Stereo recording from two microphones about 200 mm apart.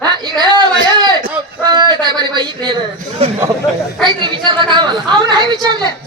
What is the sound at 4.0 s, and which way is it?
A woman's voice, 25° right (ahead or behind).